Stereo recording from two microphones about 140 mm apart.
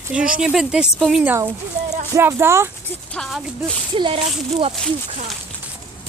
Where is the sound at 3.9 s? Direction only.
40° right (ahead or behind).